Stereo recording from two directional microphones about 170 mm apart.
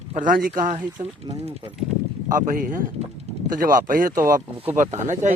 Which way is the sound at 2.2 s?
50° right (ahead or behind).